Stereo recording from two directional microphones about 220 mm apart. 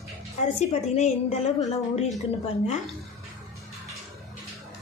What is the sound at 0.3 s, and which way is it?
A woman's voice, 30° left (ahead or behind).